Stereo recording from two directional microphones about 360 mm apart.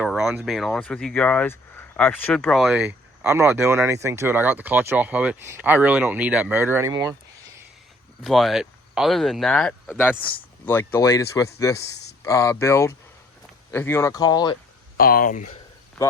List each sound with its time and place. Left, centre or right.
0.0 s speech: centre
8.2 s speech: centre
14.9 s speech: left
16.0 s cricket: centre